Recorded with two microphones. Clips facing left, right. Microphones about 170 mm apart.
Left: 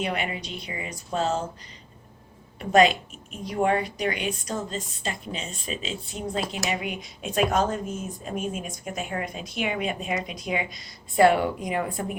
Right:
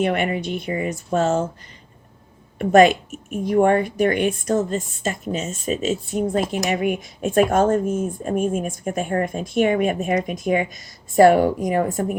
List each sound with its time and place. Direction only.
0.0 s speech: 50° right (ahead or behind)
2.6 s speech: 50° right (ahead or behind)